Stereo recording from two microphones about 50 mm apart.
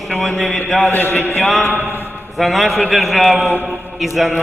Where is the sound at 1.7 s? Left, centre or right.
Left.